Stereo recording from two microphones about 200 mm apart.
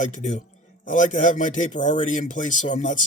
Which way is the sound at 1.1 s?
40° left (ahead or behind).